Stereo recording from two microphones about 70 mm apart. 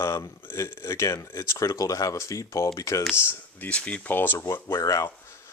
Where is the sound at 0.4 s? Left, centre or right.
Left.